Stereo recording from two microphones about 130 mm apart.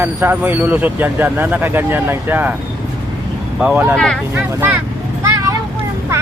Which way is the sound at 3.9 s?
5° left (ahead or behind).